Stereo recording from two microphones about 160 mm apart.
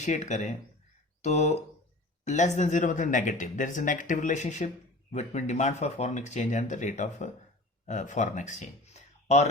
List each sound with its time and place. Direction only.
0.0 s speech: 45° left (ahead or behind)